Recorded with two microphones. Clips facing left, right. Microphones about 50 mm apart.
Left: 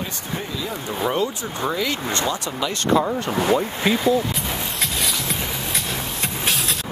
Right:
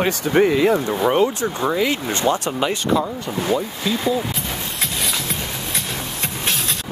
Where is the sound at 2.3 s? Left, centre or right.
Right.